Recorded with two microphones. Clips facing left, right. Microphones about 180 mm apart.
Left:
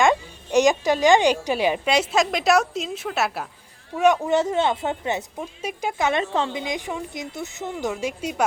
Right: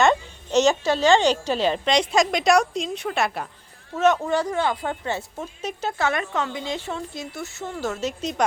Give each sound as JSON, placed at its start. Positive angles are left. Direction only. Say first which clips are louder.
{"t": 0.0, "sound": "a woman's voice", "louder": "even", "side_deg": 10}